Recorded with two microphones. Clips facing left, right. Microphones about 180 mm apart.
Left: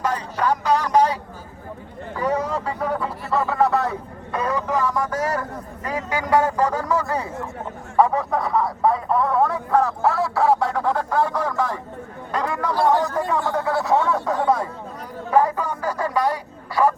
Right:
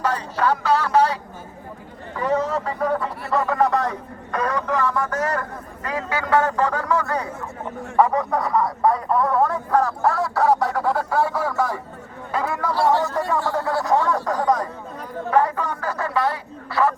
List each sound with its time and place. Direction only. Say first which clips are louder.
0.0 s speech: right 1 dB; 10° left (ahead or behind); by 12.7 s 5° right (ahead or behind)
12.9 s speech: even; 15° left (ahead or behind)
13.5 s speech: left 1 dB; centre (ahead or behind)